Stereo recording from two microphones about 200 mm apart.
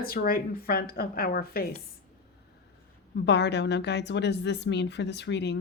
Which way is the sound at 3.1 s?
60° left (ahead or behind).